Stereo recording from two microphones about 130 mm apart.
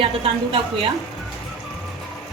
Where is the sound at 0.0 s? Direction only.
45° right (ahead or behind).